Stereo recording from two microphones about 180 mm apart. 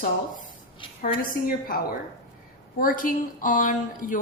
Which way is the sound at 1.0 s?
50° left (ahead or behind).